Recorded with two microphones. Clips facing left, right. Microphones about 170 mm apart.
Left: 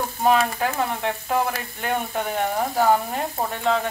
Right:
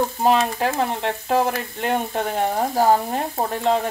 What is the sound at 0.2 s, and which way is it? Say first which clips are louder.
Frying: left 1 dB; 30° right (ahead or behind).